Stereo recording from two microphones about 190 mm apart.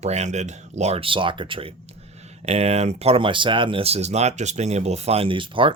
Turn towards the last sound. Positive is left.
turn(degrees=-25)  # may be behind; listen again after turning